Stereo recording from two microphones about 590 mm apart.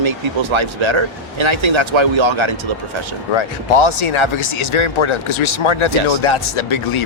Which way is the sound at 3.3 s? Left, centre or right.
Left.